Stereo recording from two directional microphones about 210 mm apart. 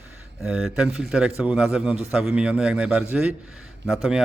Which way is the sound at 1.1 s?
5° right (ahead or behind).